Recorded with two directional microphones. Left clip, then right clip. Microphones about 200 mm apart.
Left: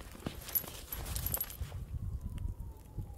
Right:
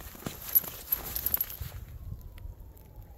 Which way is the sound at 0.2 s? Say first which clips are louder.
Right 5 dB; 65° right (ahead or behind).